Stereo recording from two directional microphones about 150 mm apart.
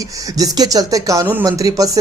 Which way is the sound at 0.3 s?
25° right (ahead or behind).